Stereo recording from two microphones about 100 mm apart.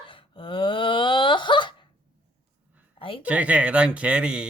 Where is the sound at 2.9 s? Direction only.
60° left (ahead or behind).